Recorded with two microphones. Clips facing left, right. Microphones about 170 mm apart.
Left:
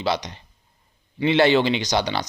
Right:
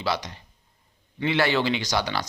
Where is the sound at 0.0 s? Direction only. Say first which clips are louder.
Left 3 dB; 20° left (ahead or behind).